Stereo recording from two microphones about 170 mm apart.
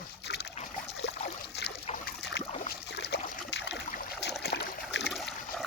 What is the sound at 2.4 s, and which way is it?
Boat, 75° left (ahead or behind).